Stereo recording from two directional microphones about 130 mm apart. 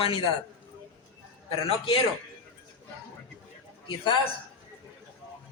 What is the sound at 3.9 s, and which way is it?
Speech, 40° left (ahead or behind).